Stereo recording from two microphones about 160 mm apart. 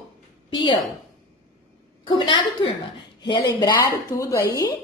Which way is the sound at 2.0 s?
30° left (ahead or behind).